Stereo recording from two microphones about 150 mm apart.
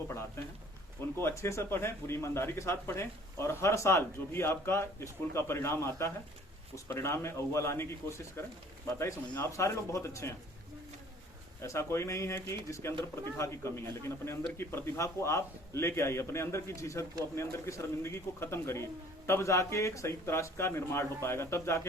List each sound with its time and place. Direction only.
0.4 s a sound: 20° left (ahead or behind)
1.2 s speech: 20° left (ahead or behind)
11.6 s speech: 20° left (ahead or behind)